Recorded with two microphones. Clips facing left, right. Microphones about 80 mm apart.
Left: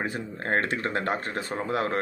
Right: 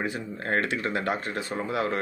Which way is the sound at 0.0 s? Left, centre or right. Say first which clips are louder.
Even; left.